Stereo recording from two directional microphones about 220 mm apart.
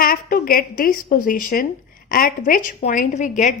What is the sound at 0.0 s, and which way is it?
A woman's voice, 40° left (ahead or behind).